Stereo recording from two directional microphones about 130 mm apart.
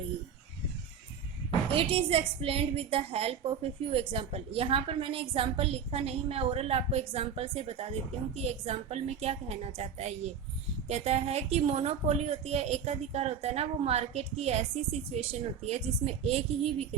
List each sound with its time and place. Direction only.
1.7 s a woman's voice: 45° right (ahead or behind)